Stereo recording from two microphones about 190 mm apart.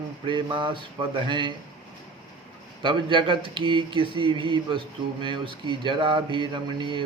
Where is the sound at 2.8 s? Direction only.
25° right (ahead or behind).